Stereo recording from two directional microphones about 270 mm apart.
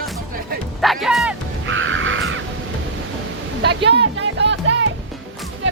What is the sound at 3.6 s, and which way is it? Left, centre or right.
Music, right.